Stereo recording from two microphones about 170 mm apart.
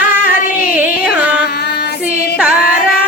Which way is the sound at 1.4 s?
70° left (ahead or behind).